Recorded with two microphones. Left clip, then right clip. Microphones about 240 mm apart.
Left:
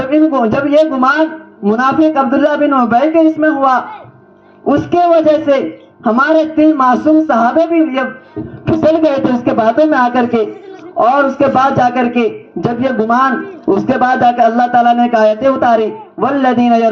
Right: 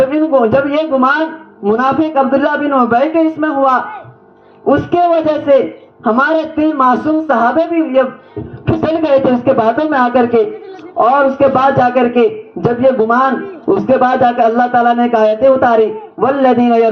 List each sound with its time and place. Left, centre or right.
0.0 s a man's voice: left